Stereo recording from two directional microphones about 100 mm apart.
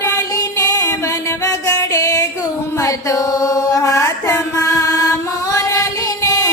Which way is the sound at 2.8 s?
35° left (ahead or behind).